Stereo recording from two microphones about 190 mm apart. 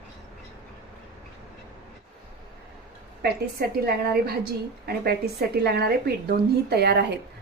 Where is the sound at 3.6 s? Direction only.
55° right (ahead or behind).